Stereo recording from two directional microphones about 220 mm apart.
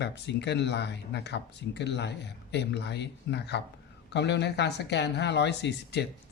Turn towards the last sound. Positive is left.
turn(degrees=50)  # may be behind; listen again after turning